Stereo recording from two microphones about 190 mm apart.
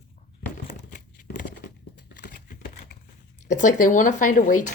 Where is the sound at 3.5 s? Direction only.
40° left (ahead or behind).